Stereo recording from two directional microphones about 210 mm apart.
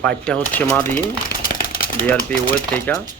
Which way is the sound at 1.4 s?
45° left (ahead or behind).